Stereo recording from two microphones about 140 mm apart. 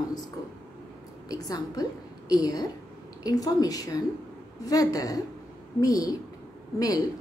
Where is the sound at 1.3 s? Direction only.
25° left (ahead or behind).